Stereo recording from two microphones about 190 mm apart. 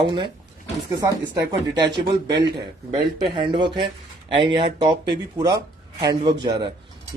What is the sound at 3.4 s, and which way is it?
A man's voice, 25° right (ahead or behind).